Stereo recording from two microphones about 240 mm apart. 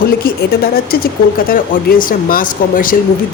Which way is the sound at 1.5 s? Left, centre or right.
Left.